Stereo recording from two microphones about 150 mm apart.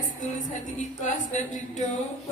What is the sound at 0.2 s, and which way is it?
A woman's voice, 60° left (ahead or behind).